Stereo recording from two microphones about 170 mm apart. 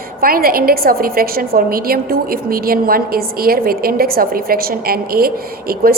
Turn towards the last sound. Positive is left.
turn(degrees=-60)  # may be behind; listen again after turning